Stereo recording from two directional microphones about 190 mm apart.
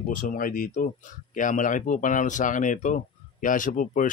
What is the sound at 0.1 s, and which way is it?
Speech, 45° left (ahead or behind).